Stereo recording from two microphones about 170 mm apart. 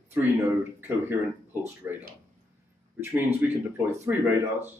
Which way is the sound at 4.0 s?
15° right (ahead or behind).